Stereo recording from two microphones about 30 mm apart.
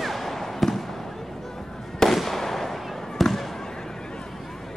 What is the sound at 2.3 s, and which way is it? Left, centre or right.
Fireworks, centre.